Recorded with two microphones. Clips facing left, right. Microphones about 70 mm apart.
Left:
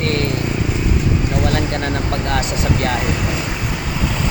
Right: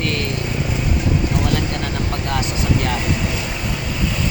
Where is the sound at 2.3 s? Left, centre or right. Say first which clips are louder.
Even; left.